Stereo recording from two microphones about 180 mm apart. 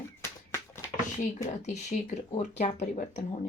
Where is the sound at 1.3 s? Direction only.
40° left (ahead or behind).